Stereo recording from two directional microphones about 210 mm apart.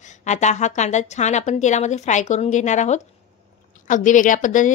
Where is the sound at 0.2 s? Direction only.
35° left (ahead or behind).